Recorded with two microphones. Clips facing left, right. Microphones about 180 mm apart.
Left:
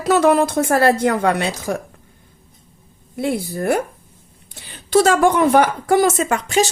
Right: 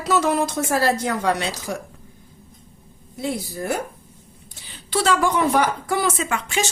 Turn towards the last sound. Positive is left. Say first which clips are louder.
# left 7 dB
turn(degrees=40)  # may be behind; listen again after turning